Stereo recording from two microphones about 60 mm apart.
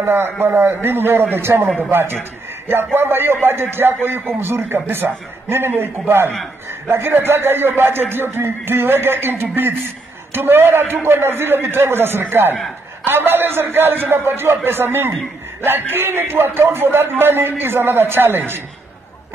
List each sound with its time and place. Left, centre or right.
0.0 s speech: right